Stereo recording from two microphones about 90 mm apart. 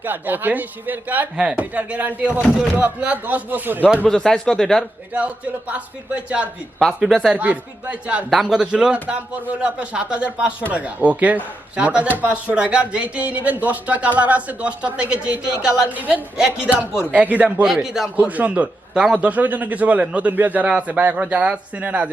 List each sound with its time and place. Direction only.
0.0 s a man's voice: 20° right (ahead or behind)
4.0 s speech: 5° left (ahead or behind)
5.1 s a man's voice: 15° right (ahead or behind)
6.7 s a man's voice: centre (ahead or behind)
8.3 s a man's voice: 5° right (ahead or behind)
17.8 s speech: 5° right (ahead or behind)
18.2 s a man's voice: 15° right (ahead or behind)